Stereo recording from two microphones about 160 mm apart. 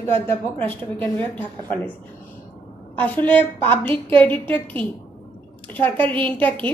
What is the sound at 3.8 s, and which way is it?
Speech, 35° right (ahead or behind).